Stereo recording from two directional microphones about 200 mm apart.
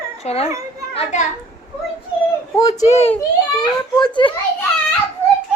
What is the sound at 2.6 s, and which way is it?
A child's voice, 30° left (ahead or behind).